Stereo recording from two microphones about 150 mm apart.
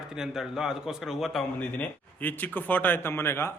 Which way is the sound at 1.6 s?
10° left (ahead or behind).